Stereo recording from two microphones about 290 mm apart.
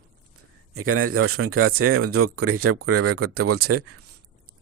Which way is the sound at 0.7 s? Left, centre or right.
Right.